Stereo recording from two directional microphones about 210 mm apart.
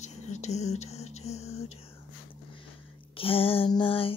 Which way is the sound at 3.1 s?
25° left (ahead or behind).